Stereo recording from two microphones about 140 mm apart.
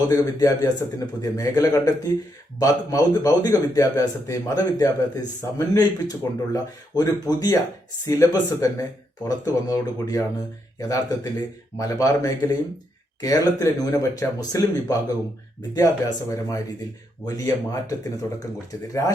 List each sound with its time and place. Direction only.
0.1 s a man's voice: 25° left (ahead or behind)